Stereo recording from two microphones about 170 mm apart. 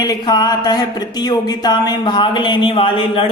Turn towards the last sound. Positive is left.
turn(degrees=30)  # may be behind; listen again after turning